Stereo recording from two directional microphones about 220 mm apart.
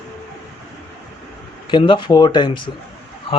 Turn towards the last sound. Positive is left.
turn(degrees=25)  # may be behind; listen again after turning